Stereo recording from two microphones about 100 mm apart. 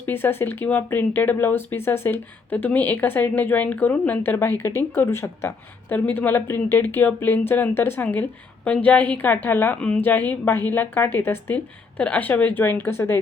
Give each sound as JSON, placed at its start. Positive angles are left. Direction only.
{"t": 0.0, "sound": "speech", "side_deg": 20}